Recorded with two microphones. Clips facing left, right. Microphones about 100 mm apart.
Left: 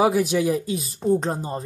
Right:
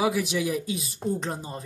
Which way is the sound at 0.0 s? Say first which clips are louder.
Left 6 dB; 40° left (ahead or behind).